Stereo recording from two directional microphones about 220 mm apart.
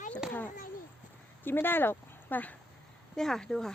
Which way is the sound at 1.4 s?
10° left (ahead or behind).